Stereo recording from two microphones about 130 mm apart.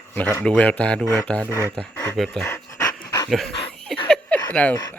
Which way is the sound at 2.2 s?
Centre (ahead or behind).